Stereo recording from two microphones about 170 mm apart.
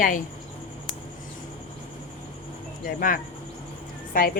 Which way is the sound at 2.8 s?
50° left (ahead or behind).